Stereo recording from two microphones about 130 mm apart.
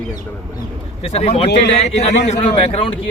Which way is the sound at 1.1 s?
50° left (ahead or behind).